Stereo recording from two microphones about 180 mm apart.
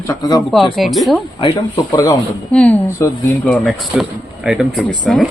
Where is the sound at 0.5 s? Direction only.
Centre (ahead or behind).